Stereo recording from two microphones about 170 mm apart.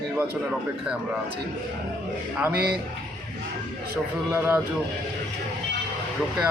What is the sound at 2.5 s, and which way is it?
Speech, 65° right (ahead or behind).